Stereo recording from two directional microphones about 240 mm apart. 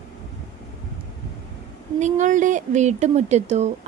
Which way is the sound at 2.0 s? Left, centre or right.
Right.